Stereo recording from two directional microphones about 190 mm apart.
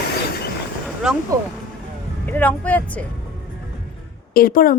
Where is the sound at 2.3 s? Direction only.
10° left (ahead or behind).